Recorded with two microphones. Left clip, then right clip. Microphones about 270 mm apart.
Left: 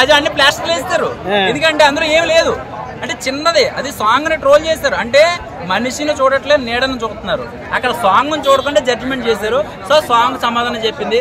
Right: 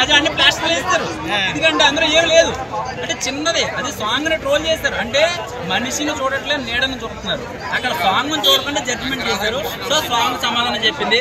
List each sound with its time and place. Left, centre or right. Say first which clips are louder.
0.0 s a man's voice: left 3 dB; centre